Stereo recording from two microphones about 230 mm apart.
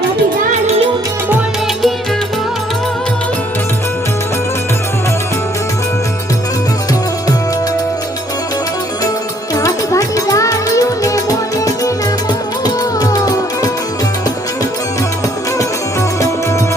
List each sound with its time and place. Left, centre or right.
9.6 s music: centre